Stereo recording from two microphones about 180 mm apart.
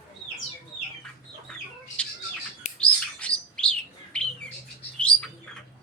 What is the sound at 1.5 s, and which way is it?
Chicken, 5° left (ahead or behind).